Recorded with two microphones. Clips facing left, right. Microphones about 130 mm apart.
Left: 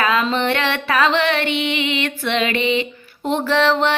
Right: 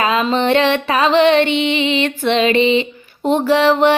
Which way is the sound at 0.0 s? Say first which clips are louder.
Right 3 dB; 20° right (ahead or behind).